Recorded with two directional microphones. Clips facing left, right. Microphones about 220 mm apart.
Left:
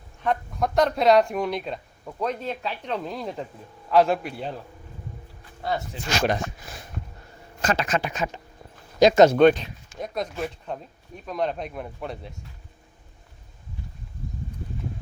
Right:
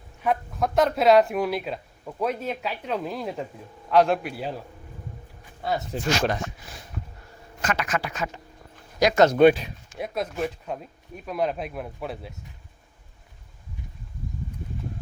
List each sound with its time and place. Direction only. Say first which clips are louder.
0.2 s speech: even; 5° right (ahead or behind)
5.9 s speech: right 7 dB; 45° right (ahead or behind)
6.6 s a sound: left 2 dB; 50° left (ahead or behind)
7.6 s speech: left 3 dB; 30° left (ahead or behind)
9.4 s speech: even; 10° right (ahead or behind)